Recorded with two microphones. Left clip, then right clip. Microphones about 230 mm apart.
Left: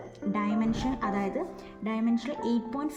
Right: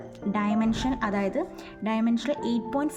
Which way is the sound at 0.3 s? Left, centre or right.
Centre.